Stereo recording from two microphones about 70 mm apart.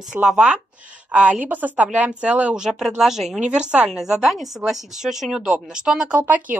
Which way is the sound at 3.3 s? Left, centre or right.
Centre.